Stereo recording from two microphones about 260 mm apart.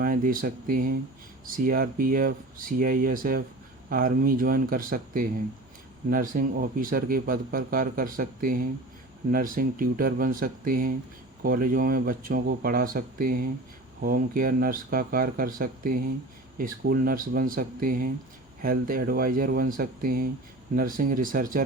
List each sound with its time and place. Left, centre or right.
0.0 s speech: right